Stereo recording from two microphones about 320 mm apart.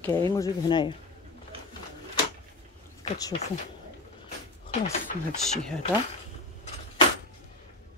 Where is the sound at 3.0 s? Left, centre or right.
Left.